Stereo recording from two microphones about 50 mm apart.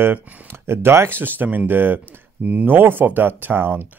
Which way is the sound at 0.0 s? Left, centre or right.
Right.